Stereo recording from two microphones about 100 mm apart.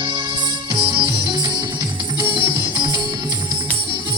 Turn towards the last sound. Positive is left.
turn(degrees=-45)  # may be behind; listen again after turning